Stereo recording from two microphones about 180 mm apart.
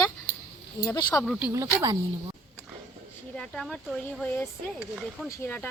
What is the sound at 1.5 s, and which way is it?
Speech, 15° right (ahead or behind).